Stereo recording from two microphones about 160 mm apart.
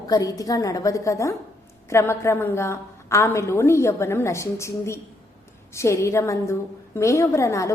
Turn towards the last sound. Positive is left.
turn(degrees=20)  # may be behind; listen again after turning